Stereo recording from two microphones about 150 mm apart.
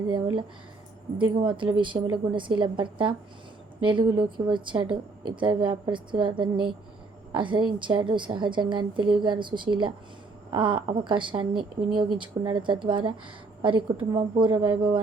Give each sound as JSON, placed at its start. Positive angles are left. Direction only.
{"t": 0.1, "sound": "a woman's voice", "side_deg": -30}